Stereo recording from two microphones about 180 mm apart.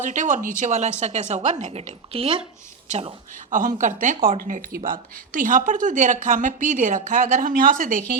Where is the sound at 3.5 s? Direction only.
45° right (ahead or behind).